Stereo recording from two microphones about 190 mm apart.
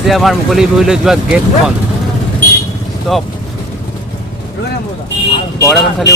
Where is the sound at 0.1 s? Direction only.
Centre (ahead or behind).